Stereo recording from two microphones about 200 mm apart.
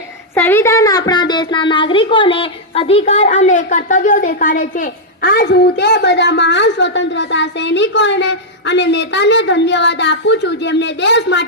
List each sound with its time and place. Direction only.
0.3 s a woman's voice: 10° left (ahead or behind); by 11.4 s 60° left (ahead or behind)